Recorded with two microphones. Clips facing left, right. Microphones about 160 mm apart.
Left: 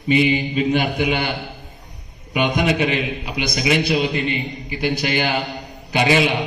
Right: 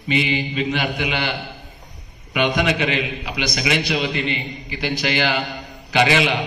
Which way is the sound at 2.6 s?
45° left (ahead or behind).